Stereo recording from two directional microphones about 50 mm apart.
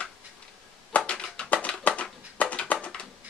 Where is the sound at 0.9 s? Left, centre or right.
Left.